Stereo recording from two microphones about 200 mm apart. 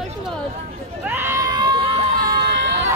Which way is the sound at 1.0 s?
10° right (ahead or behind).